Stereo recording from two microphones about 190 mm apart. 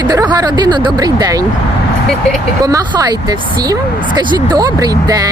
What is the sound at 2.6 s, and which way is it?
Speech, 20° right (ahead or behind).